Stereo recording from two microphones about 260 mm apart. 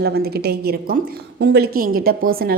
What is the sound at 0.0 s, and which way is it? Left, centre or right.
A woman's voice, right.